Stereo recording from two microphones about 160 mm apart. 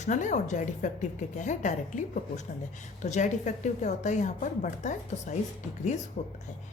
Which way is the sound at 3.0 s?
50° left (ahead or behind).